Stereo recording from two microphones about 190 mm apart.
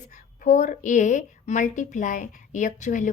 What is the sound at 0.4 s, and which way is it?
A woman's voice, 40° left (ahead or behind).